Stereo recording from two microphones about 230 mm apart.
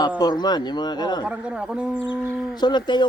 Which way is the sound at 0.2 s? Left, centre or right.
Centre.